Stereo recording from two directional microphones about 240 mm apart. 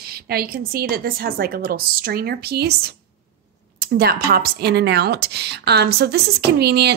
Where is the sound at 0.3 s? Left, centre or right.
Right.